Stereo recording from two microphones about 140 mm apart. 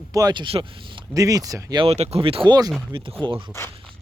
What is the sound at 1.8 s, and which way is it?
Speech, 50° right (ahead or behind).